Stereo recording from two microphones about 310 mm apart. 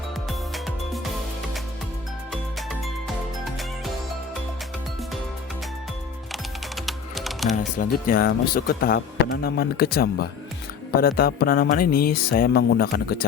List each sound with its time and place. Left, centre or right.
2.3 s music: centre
6.8 s typing: centre
7.6 s speech: left